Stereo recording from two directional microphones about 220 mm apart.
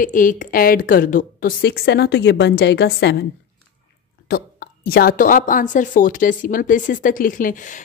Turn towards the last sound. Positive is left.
turn(degrees=35)  # may be behind; listen again after turning